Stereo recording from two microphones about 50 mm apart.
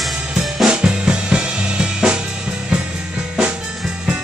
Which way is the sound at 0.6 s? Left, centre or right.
Centre.